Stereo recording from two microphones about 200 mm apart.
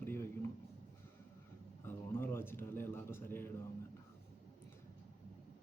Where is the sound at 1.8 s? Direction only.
10° left (ahead or behind).